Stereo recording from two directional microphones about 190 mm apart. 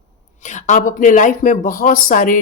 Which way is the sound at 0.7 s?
45° left (ahead or behind).